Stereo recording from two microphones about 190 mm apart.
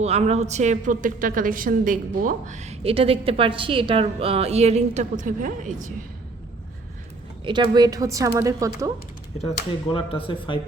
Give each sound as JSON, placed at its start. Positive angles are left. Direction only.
{"t": 0.0, "sound": "a woman's voice", "side_deg": -35}
{"t": 7.4, "sound": "a woman's voice", "side_deg": -25}
{"t": 9.9, "sound": "speech", "side_deg": 30}